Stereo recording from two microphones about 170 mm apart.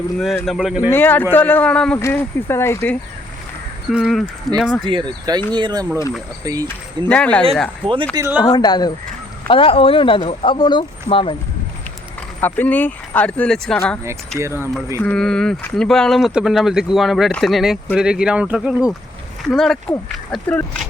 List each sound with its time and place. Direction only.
0.4 s speech: centre (ahead or behind)
0.9 s speech: 10° left (ahead or behind)
3.9 s speech: centre (ahead or behind)
4.9 s speech: 25° right (ahead or behind)
6.7 s speech: 10° left (ahead or behind)
8.1 s speech: 10° right (ahead or behind)
8.4 s speech: 25° left (ahead or behind)
12.4 s speech: 10° left (ahead or behind)
14.3 s speech: 15° right (ahead or behind)
14.9 s speech: 5° left (ahead or behind)